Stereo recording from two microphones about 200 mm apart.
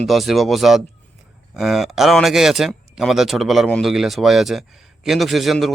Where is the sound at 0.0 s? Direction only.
Centre (ahead or behind).